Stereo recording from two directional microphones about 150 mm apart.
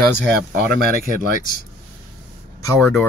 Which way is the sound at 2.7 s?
15° left (ahead or behind).